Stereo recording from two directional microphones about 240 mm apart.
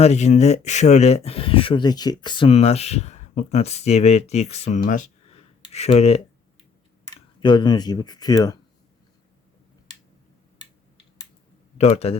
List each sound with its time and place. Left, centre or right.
0.0 s speech: left
11.8 s speech: left